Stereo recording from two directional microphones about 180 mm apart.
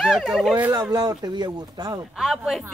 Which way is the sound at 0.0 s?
Centre (ahead or behind).